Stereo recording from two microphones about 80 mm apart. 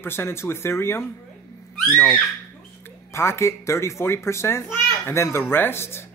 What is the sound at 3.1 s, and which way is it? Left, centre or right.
Speech, left.